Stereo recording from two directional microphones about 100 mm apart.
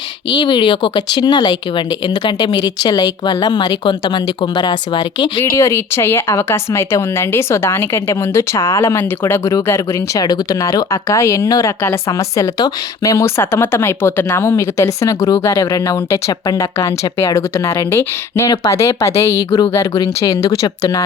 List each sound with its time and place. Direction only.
0.3 s speech: 55° left (ahead or behind)
5.4 s speech: 25° left (ahead or behind)